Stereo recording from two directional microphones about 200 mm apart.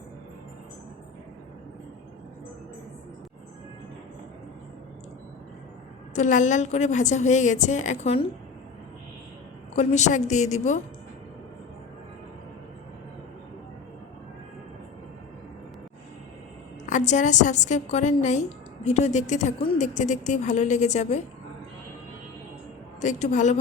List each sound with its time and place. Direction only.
6.1 s a woman's voice: 40° left (ahead or behind)
9.7 s a woman's voice: 35° left (ahead or behind)
16.8 s a woman's voice: 35° left (ahead or behind)
23.0 s a woman's voice: 35° left (ahead or behind)